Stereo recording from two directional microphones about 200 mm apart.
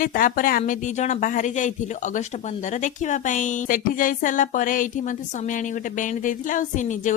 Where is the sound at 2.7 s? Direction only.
35° left (ahead or behind).